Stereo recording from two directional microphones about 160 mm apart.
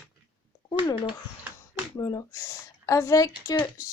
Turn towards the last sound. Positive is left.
turn(degrees=20)  # may be behind; listen again after turning